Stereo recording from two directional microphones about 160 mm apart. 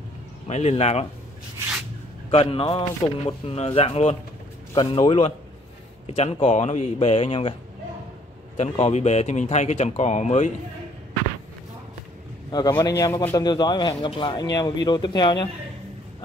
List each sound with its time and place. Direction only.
0.5 s speech: 45° left (ahead or behind)
2.3 s speech: 35° left (ahead or behind)
8.5 s speech: 45° left (ahead or behind)
12.4 s a man's voice: 25° left (ahead or behind)